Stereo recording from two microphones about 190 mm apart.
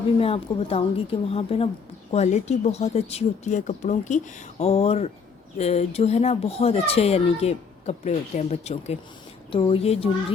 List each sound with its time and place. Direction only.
0.2 s a woman's voice: 30° left (ahead or behind)